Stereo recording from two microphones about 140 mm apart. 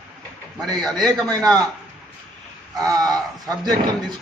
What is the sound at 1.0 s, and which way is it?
Speech, 5° left (ahead or behind).